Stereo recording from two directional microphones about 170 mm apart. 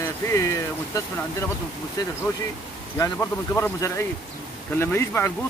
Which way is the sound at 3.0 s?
15° left (ahead or behind).